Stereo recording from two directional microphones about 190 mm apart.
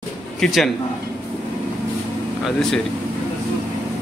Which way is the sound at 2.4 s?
Centre (ahead or behind).